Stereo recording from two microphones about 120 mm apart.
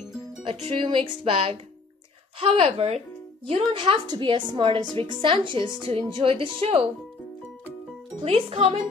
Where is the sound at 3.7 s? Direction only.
40° right (ahead or behind).